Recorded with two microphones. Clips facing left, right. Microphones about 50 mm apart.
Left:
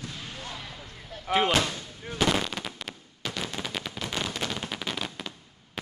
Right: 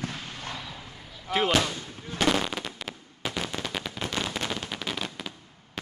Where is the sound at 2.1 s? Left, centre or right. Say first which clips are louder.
Right 1 dB; centre.